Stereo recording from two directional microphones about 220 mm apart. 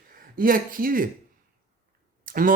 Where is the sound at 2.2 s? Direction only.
40° right (ahead or behind).